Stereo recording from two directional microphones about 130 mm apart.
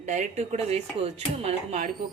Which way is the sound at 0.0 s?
70° right (ahead or behind).